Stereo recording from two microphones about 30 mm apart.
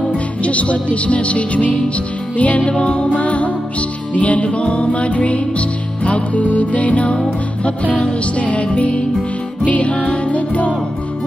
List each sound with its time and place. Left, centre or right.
0.1 s music: left
2.7 s music: left
4.5 s music: left
9.9 s music: left
10.3 s music: left